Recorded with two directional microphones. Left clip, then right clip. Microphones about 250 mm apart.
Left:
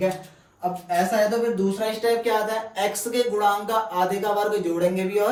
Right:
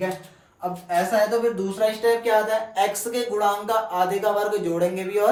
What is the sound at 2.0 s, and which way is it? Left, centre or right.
Speech, centre.